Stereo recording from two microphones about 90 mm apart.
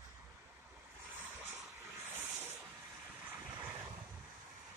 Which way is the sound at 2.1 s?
25° right (ahead or behind).